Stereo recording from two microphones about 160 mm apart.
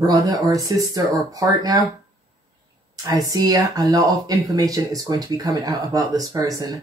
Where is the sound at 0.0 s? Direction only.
20° right (ahead or behind).